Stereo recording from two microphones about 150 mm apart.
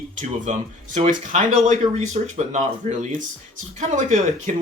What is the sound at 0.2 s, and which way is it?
Speech, 55° right (ahead or behind).